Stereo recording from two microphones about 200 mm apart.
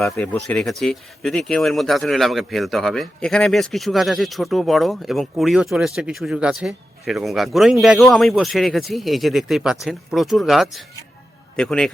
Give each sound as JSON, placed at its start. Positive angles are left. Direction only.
{"t": 0.0, "sound": "speech", "side_deg": 5}